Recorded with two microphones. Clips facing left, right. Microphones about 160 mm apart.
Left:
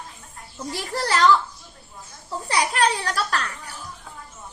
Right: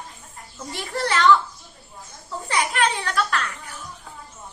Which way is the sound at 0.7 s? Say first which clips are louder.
Even; 40° left (ahead or behind).